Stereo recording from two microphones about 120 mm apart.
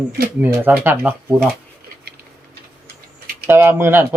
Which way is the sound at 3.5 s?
20° right (ahead or behind).